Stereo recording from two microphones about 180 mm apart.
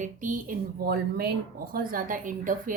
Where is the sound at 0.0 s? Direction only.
45° right (ahead or behind).